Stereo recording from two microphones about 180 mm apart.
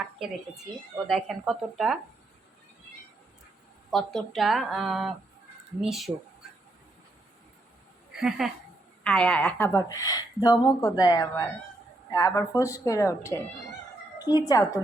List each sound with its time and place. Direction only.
1.0 s speech: centre (ahead or behind)
3.9 s speech: centre (ahead or behind)
8.4 s a woman's voice: centre (ahead or behind); by 14.8 s 20° left (ahead or behind)